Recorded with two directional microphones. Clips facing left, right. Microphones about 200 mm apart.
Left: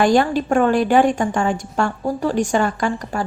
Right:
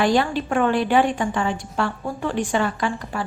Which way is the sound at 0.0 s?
45° left (ahead or behind).